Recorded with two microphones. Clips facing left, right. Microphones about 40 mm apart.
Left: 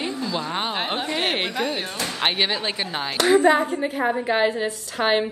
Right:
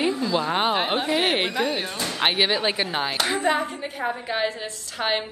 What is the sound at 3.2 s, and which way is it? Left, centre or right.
Speech, left.